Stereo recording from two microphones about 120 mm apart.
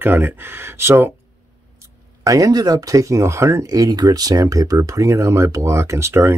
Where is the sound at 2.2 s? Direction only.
30° right (ahead or behind).